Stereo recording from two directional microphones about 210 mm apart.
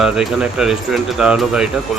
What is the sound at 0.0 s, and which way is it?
A man's voice, 5° right (ahead or behind).